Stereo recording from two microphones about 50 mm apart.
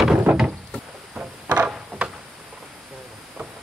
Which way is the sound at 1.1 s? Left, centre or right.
Right.